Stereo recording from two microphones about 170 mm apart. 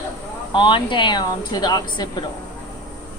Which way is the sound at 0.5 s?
30° left (ahead or behind).